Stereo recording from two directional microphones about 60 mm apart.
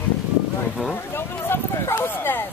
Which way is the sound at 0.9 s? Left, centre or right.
Left.